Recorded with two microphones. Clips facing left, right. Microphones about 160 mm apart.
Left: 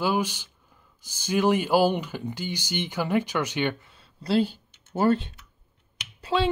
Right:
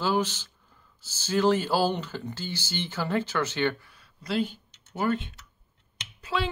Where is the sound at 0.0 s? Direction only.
10° left (ahead or behind).